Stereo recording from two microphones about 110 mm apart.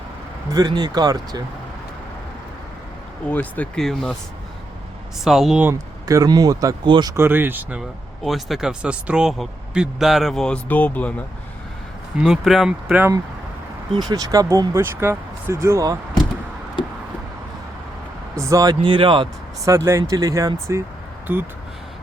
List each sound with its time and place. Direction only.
0.5 s speech: 40° right (ahead or behind)
3.2 s speech: 15° left (ahead or behind)
3.8 s speech: 5° left (ahead or behind)
5.2 s speech: 5° right (ahead or behind)
5.5 s speech: 20° right (ahead or behind)
6.1 s speech: 35° right (ahead or behind)
6.8 s speech: 45° right (ahead or behind)
7.1 s speech: 20° right (ahead or behind)
8.2 s speech: centre (ahead or behind)
12.2 s speech: centre (ahead or behind)
14.1 s speech: 35° right (ahead or behind)
18.3 s speech: 30° right (ahead or behind); by 19.3 s 50° right (ahead or behind)
19.6 s speech: 25° right (ahead or behind)